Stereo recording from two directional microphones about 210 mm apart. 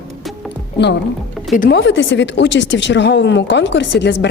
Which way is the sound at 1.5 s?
40° left (ahead or behind).